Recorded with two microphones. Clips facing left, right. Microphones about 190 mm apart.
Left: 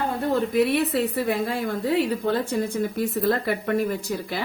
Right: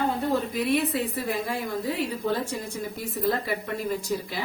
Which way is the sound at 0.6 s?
70° left (ahead or behind).